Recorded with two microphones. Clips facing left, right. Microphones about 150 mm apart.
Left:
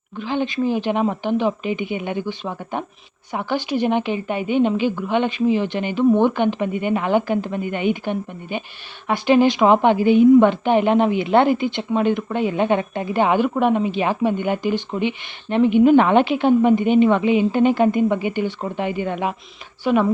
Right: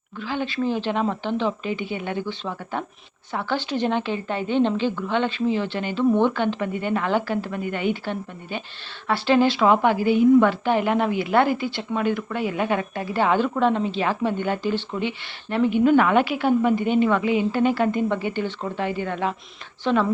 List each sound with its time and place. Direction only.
0.2 s a woman's voice: 20° left (ahead or behind)